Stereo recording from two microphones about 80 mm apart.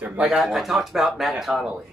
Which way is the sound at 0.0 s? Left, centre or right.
Centre.